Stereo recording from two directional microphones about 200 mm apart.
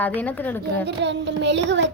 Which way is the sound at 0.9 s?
60° right (ahead or behind).